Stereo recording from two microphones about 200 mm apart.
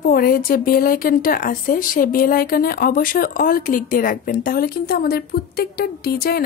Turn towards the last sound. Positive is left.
turn(degrees=50)  # may be behind; listen again after turning